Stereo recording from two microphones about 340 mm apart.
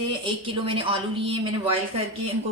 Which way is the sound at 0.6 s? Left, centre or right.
Centre.